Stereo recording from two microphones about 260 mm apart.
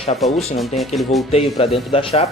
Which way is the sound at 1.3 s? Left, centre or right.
Left.